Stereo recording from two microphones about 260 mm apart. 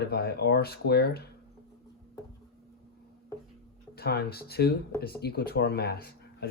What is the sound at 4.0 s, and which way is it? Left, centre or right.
Speech, left.